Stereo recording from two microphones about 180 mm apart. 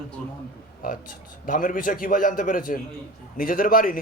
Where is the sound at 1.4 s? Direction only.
45° left (ahead or behind).